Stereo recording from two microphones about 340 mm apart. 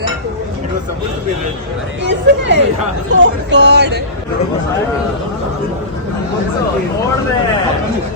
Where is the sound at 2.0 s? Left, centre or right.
Right.